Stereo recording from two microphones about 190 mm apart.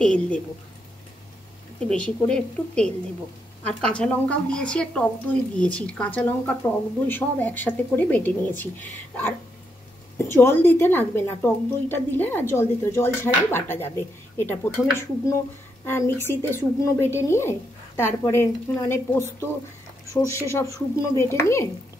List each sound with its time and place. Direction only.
0.0 s a woman's voice: 5° left (ahead or behind)
1.9 s a woman's voice: 5° left (ahead or behind)